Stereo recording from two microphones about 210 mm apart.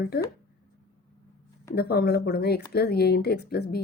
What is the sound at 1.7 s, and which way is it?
A woman's voice, 50° left (ahead or behind).